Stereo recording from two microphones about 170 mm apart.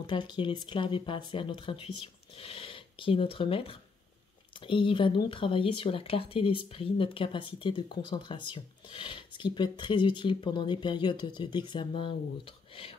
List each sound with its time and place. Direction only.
0.0 s speech: 25° left (ahead or behind)